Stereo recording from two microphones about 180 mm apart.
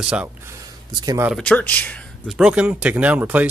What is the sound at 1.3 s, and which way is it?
Speech, 5° left (ahead or behind).